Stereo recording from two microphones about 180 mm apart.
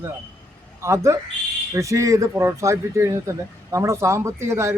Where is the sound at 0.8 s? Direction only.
15° right (ahead or behind).